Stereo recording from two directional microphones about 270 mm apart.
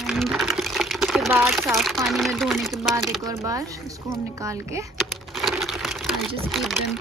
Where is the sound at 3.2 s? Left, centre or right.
Centre.